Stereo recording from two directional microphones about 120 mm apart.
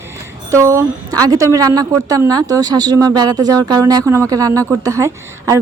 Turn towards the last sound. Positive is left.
turn(degrees=-25)  # may be behind; listen again after turning